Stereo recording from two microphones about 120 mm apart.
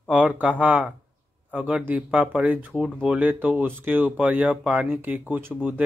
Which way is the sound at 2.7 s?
Centre (ahead or behind).